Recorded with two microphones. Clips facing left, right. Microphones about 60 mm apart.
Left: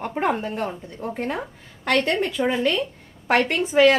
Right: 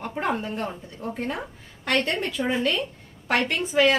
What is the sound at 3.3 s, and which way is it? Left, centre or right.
Speech, left.